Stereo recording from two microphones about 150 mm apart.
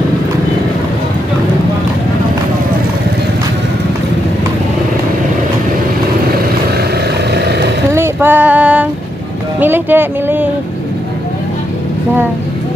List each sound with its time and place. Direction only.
6.8 s vehicle: 90° right
7.9 s female singing: 15° right (ahead or behind)
9.6 s a sound: 15° right (ahead or behind)